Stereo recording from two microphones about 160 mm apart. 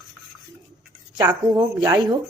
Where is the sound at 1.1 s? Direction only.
25° right (ahead or behind).